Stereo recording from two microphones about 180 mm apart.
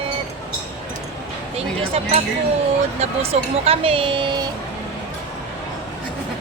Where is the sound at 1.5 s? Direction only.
35° right (ahead or behind).